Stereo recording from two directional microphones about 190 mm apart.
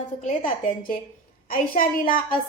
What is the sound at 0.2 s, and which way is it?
A woman's voice, 40° left (ahead or behind).